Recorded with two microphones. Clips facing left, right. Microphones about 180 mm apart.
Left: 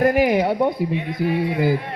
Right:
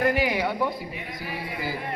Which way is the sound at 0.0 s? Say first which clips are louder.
Left 7 dB; 50° left (ahead or behind).